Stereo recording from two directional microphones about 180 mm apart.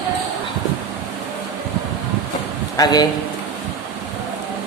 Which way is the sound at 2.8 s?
20° left (ahead or behind).